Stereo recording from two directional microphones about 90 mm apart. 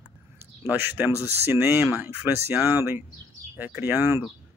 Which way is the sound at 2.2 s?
20° right (ahead or behind).